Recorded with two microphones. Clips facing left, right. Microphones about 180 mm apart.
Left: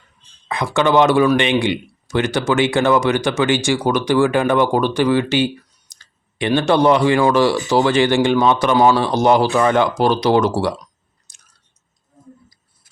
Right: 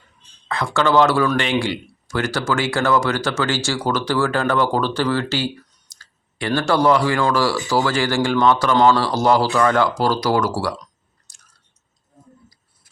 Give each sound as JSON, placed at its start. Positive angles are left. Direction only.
{"t": 0.4, "sound": "speech", "side_deg": 15}
{"t": 11.3, "sound": "chewing", "side_deg": 20}